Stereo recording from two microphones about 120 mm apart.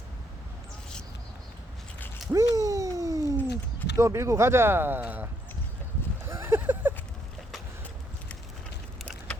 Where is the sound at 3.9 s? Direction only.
25° right (ahead or behind).